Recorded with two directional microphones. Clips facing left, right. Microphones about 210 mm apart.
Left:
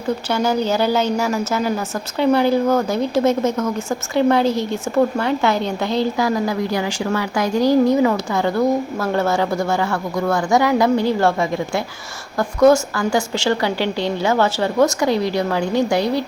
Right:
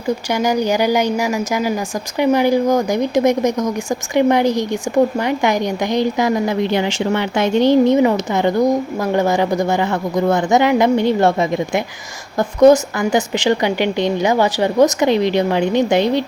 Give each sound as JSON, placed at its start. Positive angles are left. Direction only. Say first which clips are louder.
{"t": 0.3, "sound": "speech", "louder": "right 2 dB", "side_deg": -15}